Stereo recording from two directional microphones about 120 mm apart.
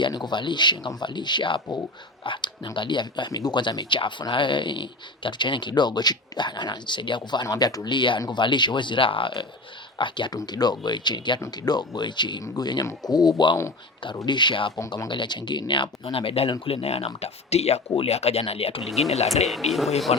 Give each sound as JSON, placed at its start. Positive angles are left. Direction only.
{"t": 0.0, "sound": "speech", "side_deg": 40}
{"t": 19.1, "sound": "speech", "side_deg": 65}
{"t": 19.5, "sound": "speech", "side_deg": 0}
{"t": 20.1, "sound": "speech", "side_deg": 55}